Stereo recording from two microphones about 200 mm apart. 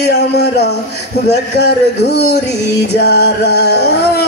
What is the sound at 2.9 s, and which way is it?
Music, 55° left (ahead or behind).